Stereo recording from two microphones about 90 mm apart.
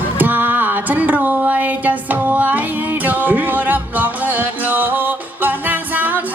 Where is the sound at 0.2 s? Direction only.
20° right (ahead or behind).